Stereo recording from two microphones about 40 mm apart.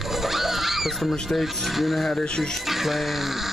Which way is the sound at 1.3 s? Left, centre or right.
Centre.